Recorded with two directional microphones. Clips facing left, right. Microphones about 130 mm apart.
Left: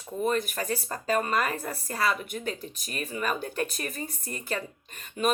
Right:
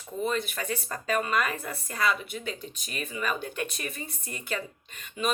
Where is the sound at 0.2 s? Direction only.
45° left (ahead or behind).